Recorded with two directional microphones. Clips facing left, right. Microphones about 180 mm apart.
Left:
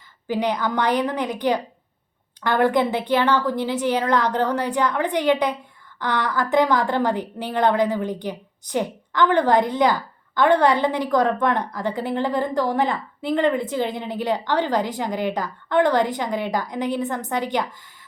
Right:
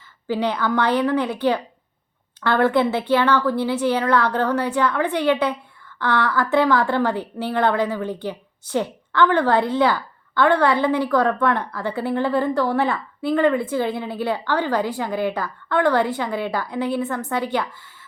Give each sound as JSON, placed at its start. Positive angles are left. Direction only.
{"t": 0.3, "sound": "a woman's voice", "side_deg": 15}